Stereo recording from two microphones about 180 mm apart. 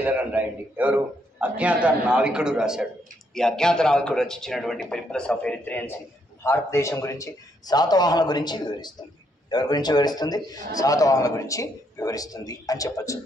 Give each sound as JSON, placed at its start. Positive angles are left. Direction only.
{"t": 0.0, "sound": "a man's voice", "side_deg": -10}